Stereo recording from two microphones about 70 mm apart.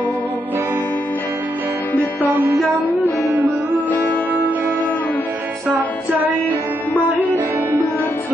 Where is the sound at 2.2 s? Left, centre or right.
Right.